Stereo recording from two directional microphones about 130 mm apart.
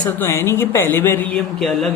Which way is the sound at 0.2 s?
20° left (ahead or behind).